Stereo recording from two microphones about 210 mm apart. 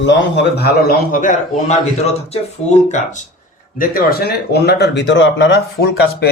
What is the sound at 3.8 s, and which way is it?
Speech, 45° left (ahead or behind).